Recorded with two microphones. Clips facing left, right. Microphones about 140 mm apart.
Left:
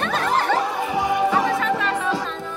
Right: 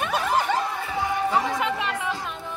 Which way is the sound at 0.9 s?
15° left (ahead or behind).